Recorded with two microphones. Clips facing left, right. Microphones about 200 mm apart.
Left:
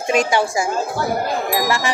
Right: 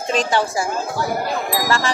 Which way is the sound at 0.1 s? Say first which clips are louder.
Left 2 dB; 10° left (ahead or behind).